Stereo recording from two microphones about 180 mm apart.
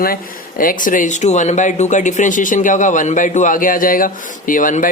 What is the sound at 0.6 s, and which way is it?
Speech, 50° left (ahead or behind).